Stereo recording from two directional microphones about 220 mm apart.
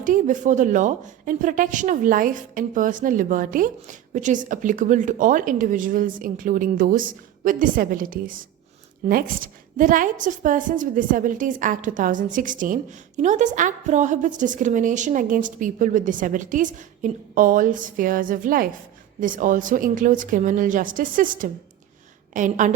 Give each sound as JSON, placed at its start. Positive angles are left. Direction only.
{"t": 0.0, "sound": "a woman's voice", "side_deg": -35}